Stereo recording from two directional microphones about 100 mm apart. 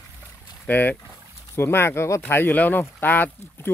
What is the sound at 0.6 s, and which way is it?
Speech, 20° left (ahead or behind).